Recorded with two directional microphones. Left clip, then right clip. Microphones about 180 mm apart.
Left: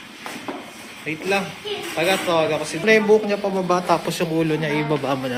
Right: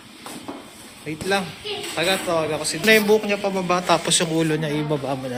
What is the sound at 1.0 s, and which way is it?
Speech, 10° right (ahead or behind).